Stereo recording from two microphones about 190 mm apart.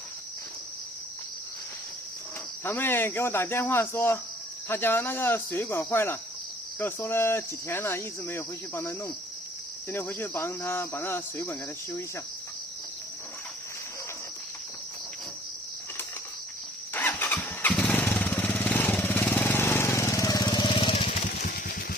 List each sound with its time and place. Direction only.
2.6 s speech: 10° left (ahead or behind)
16.9 s motorcycle: 10° left (ahead or behind); by 21.3 s 35° left (ahead or behind)
21.3 s vehicle: 55° left (ahead or behind)